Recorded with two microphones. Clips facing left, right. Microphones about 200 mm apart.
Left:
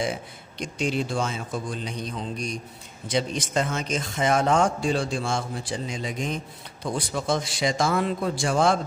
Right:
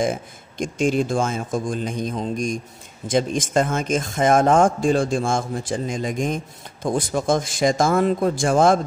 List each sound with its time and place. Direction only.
0.0 s speech: 50° right (ahead or behind)